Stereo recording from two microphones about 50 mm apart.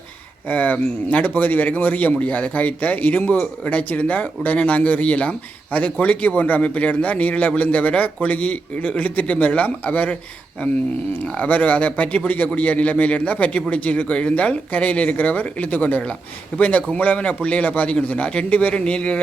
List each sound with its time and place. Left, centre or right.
0.4 s a man's voice: left
11.3 s a man's voice: left